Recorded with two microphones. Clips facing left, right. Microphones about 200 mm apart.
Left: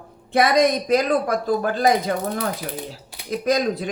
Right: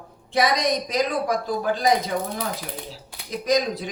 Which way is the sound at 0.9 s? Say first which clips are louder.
Left 4 dB; 55° left (ahead or behind).